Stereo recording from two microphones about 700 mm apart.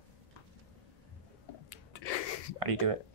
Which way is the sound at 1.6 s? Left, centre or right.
Left.